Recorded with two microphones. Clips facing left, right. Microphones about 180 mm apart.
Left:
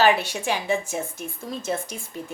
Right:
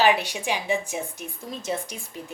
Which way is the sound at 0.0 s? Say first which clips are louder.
Left 1 dB; 15° right (ahead or behind).